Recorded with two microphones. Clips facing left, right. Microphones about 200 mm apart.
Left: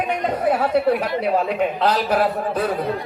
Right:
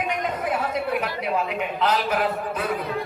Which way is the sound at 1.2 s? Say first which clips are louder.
Left 6 dB; 35° left (ahead or behind).